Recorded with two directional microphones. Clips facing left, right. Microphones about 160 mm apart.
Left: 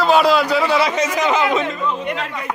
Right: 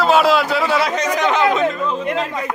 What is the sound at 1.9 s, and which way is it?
Speech, 35° right (ahead or behind).